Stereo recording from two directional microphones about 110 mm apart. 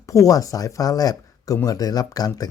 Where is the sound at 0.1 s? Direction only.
30° left (ahead or behind).